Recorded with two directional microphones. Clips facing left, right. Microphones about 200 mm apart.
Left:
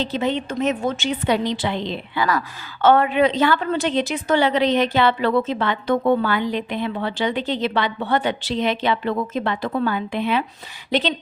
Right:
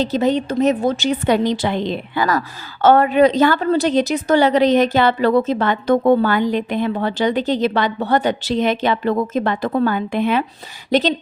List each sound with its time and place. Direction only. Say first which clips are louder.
0.0 s a woman's voice: right 5 dB; 40° right (ahead or behind)